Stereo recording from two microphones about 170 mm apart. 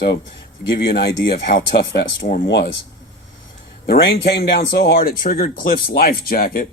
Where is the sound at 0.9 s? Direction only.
70° left (ahead or behind); by 2.4 s 55° left (ahead or behind).